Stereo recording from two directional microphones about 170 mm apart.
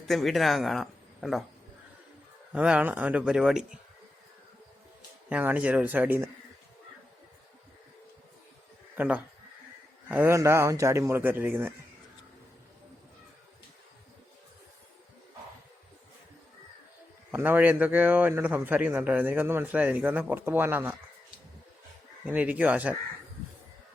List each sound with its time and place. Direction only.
0.1 s speech: centre (ahead or behind)
2.5 s a man's voice: 5° right (ahead or behind)
5.3 s a man's voice: 10° right (ahead or behind)
9.0 s a man's voice: 10° right (ahead or behind)
17.3 s a man's voice: 10° right (ahead or behind)
22.3 s a man's voice: 10° right (ahead or behind)